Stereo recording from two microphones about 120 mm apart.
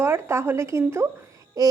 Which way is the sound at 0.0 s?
20° right (ahead or behind).